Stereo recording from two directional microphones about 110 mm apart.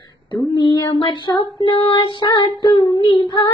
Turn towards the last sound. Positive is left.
turn(degrees=45)  # may be behind; listen again after turning